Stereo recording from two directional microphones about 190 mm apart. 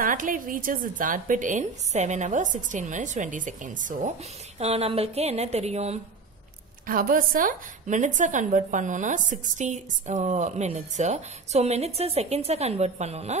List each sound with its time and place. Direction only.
0.0 s a woman's voice: 45° right (ahead or behind)
4.6 s a woman's voice: 35° right (ahead or behind)
6.9 s a woman's voice: 45° right (ahead or behind)